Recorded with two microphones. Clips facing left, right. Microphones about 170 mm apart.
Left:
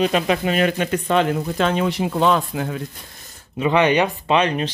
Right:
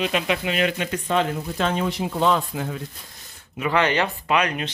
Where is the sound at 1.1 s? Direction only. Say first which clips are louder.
Left 3 dB; 75° left (ahead or behind).